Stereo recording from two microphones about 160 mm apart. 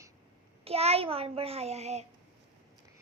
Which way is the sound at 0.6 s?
40° right (ahead or behind).